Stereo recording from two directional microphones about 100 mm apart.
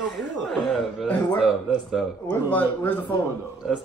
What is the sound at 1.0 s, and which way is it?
Speech, 15° left (ahead or behind).